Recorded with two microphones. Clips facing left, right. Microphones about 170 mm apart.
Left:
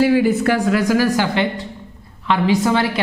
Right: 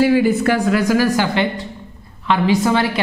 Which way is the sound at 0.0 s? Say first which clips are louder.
Right 1 dB; 5° right (ahead or behind).